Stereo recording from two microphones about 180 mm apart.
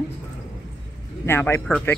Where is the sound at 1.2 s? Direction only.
15° left (ahead or behind).